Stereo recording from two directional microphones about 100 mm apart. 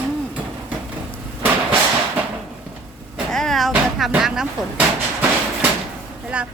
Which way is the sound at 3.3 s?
5° left (ahead or behind).